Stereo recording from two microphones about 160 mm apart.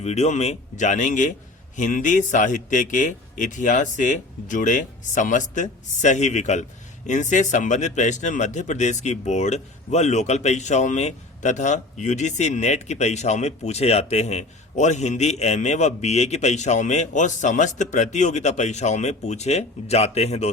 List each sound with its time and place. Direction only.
0.0 s speech: 45° left (ahead or behind)